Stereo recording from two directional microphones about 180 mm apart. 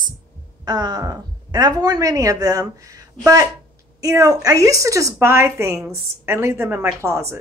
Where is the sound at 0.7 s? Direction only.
20° right (ahead or behind).